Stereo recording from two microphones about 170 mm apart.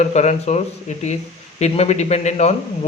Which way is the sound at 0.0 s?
40° left (ahead or behind).